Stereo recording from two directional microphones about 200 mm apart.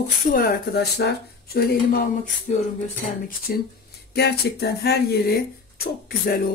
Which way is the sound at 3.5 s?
50° left (ahead or behind).